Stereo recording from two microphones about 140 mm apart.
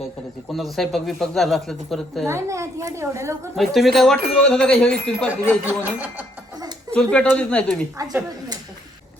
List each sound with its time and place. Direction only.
0.4 s speech: centre (ahead or behind)
2.2 s a woman's voice: 20° right (ahead or behind)
3.5 s speech: centre (ahead or behind)
5.6 s speech: 10° right (ahead or behind)
6.9 s speech: 10° left (ahead or behind)